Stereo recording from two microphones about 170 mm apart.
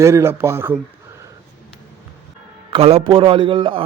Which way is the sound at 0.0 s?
15° right (ahead or behind).